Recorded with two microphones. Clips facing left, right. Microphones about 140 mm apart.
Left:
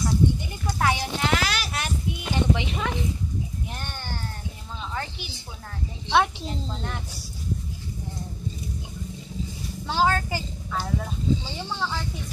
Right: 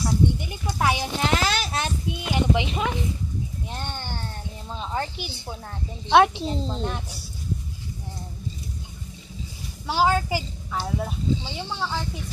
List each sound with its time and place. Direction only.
0.0 s a sound: 15° right (ahead or behind)
6.0 s a woman's voice: 60° right (ahead or behind)
6.7 s speech: 20° right (ahead or behind)
9.8 s a child's voice: 10° right (ahead or behind)